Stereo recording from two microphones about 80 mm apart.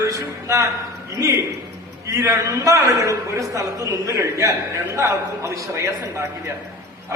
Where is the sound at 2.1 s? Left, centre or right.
Right.